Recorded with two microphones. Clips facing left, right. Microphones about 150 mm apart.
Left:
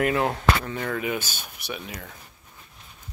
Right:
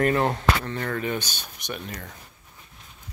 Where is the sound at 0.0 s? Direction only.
Centre (ahead or behind).